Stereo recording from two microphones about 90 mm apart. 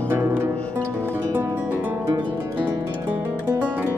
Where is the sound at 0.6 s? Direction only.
15° left (ahead or behind).